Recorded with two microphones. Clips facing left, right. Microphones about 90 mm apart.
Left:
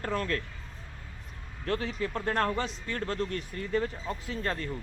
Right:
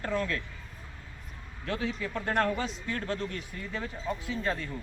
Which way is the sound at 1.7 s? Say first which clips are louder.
Left 2 dB; 50° left (ahead or behind).